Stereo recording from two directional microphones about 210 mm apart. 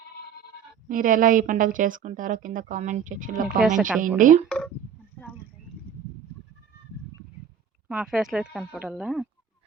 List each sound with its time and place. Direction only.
0.9 s a woman's voice: 40° right (ahead or behind)
3.8 s speech: centre (ahead or behind)
4.2 s a woman's voice: 35° right (ahead or behind)
4.4 s speech: 5° left (ahead or behind)
5.2 s a sound: 5° left (ahead or behind)
7.9 s speech: 5° right (ahead or behind)